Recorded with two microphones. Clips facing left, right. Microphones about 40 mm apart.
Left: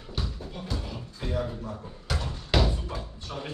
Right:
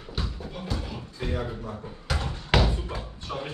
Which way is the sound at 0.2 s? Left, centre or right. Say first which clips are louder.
Right 1 dB; centre.